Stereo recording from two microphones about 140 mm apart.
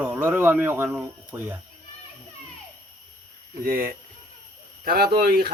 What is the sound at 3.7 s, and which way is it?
Speech, 90° right.